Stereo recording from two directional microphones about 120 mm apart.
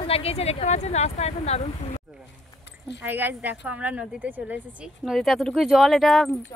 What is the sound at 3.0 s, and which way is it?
Speech, 15° right (ahead or behind).